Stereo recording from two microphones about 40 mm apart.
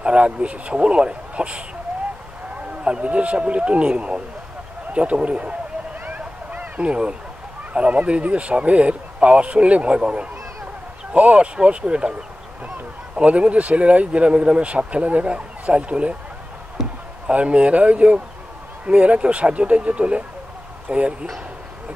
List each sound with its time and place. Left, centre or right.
0.0 s a man's voice: right
2.8 s speech: right
6.0 s a sound: right
6.9 s speech: right
17.3 s speech: right